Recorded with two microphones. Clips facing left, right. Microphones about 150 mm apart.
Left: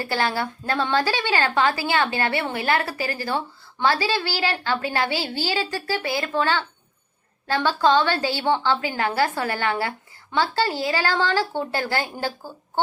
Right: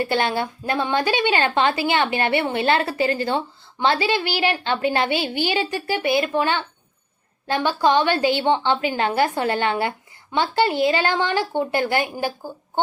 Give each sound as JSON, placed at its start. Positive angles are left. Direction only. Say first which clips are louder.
{"t": 0.0, "sound": "a woman's voice", "louder": "right 3 dB", "side_deg": -20}